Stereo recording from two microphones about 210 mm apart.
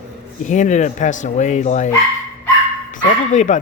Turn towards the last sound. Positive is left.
turn(degrees=35)  # may be behind; listen again after turning